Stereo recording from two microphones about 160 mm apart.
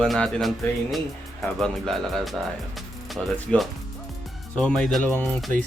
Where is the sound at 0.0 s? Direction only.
5° left (ahead or behind).